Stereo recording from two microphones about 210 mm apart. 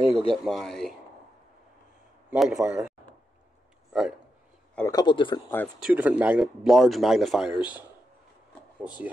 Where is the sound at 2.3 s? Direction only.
5° right (ahead or behind).